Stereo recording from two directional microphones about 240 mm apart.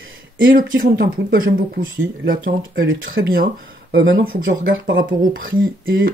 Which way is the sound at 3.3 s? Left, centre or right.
Right.